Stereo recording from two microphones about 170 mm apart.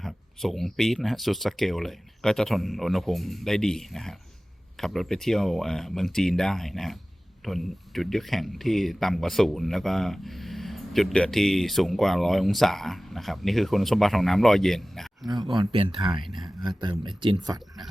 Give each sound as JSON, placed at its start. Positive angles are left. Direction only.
{"t": 0.0, "sound": "speech", "side_deg": 0}
{"t": 15.3, "sound": "speech", "side_deg": -25}